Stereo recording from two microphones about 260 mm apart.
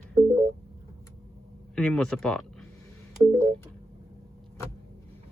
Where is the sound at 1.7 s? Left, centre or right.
Centre.